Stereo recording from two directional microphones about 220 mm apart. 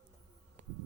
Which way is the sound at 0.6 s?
35° right (ahead or behind).